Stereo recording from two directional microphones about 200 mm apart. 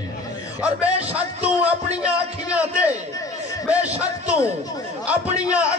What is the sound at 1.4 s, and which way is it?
A man's voice, 5° right (ahead or behind).